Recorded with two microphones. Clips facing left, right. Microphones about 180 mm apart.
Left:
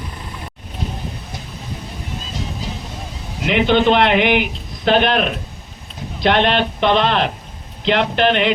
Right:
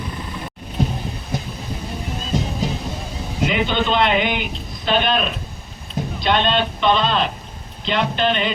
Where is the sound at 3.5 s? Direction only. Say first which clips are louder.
Left 7 dB; 75° left (ahead or behind).